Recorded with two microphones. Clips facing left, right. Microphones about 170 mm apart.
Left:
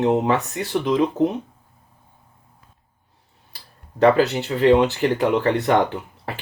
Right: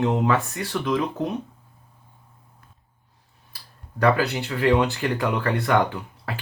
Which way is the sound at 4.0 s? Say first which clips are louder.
Left 5 dB; 20° left (ahead or behind).